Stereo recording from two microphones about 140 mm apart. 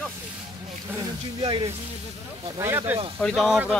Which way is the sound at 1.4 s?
45° right (ahead or behind).